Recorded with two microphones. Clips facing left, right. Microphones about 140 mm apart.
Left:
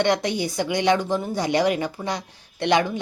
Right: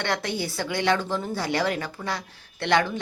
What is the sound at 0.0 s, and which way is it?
A woman's voice, 20° left (ahead or behind).